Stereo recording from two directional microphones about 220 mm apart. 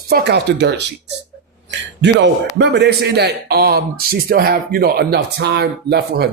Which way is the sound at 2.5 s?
50° right (ahead or behind).